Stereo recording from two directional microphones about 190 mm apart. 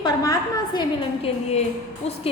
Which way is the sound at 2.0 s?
35° left (ahead or behind).